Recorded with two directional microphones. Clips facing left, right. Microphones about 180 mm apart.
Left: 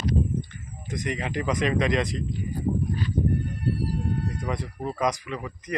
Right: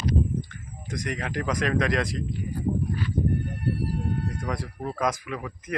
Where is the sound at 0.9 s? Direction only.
Centre (ahead or behind).